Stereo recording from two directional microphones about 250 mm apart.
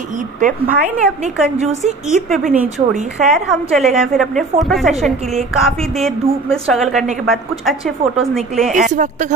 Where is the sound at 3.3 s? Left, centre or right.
Centre.